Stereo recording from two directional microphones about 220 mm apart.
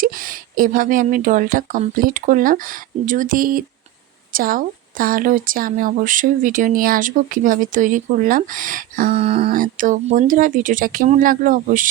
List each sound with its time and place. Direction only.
0.0 s a woman's voice: 40° right (ahead or behind)
9.1 s speech: 30° right (ahead or behind)